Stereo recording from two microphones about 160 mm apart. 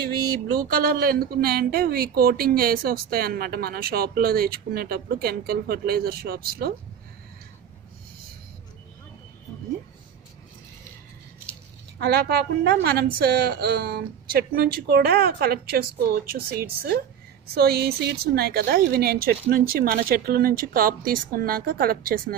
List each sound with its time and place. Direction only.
0.7 s speech: 70° right (ahead or behind)
12.0 s a woman's voice: 80° right; by 22.2 s 65° right (ahead or behind)